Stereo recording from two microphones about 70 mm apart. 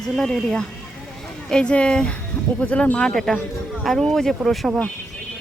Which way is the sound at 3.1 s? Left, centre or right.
Centre.